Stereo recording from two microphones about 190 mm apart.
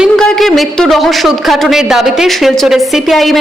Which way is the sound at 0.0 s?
Centre (ahead or behind).